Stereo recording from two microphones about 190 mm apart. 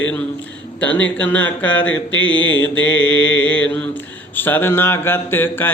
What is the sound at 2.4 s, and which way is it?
Mantra, 80° left.